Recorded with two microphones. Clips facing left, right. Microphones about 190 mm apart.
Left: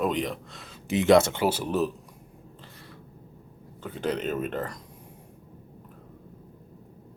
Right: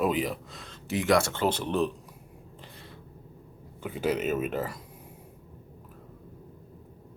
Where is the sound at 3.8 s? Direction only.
5° right (ahead or behind).